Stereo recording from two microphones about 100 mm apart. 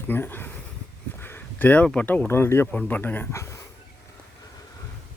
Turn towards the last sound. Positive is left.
turn(degrees=30)  # may be behind; listen again after turning